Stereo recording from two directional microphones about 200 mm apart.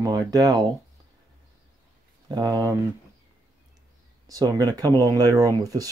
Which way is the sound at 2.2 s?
20° right (ahead or behind).